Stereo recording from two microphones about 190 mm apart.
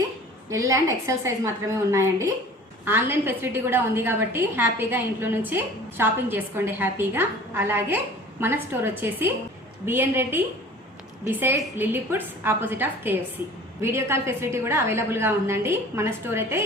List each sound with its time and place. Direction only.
0.5 s a woman's voice: 15° right (ahead or behind)